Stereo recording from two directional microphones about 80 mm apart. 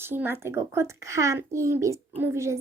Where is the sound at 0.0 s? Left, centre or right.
Right.